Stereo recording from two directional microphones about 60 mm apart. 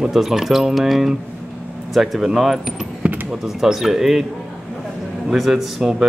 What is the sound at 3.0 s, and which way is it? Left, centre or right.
Basketball bounce, right.